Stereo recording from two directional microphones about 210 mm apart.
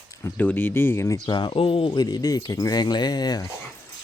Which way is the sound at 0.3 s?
10° left (ahead or behind).